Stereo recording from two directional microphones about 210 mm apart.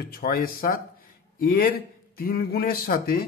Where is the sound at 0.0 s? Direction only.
45° left (ahead or behind).